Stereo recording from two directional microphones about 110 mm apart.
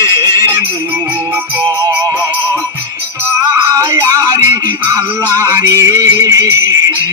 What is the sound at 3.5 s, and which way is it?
Music, 30° right (ahead or behind).